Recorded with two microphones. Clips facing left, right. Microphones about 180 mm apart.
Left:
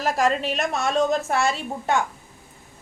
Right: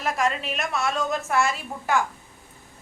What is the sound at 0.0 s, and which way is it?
A woman's voice, 35° left (ahead or behind).